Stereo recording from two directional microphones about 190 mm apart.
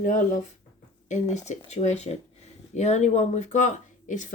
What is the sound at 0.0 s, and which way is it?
Speech, 45° left (ahead or behind).